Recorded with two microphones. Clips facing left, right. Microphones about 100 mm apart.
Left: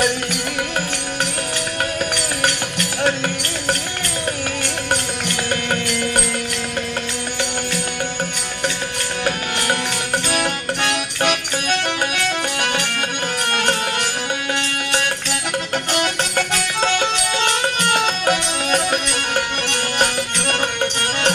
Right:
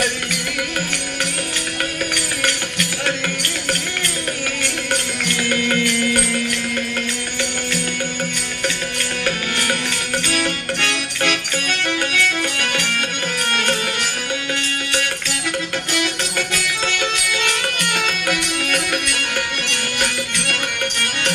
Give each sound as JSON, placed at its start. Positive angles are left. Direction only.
{"t": 5.3, "sound": "music", "side_deg": 25}
{"t": 10.3, "sound": "music", "side_deg": 20}
{"t": 15.9, "sound": "music", "side_deg": 40}